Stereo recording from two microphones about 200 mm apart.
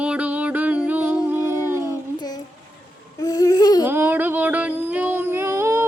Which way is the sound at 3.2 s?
20° left (ahead or behind).